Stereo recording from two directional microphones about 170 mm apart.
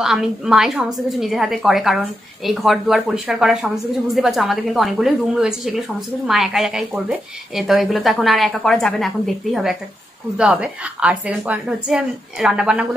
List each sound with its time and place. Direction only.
0.0 s a woman's voice: 5° right (ahead or behind)